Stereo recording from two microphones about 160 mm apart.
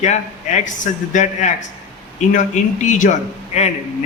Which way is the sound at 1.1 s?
50° left (ahead or behind).